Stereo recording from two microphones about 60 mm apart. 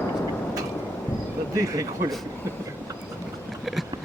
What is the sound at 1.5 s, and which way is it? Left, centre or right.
Speech, right.